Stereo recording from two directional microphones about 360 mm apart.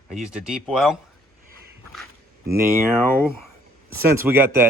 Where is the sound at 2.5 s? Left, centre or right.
Centre.